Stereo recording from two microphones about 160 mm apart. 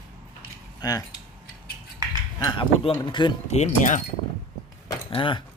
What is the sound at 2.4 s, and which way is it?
Speech, 30° left (ahead or behind).